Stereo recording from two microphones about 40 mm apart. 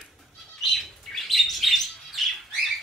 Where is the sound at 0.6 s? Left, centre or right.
Centre.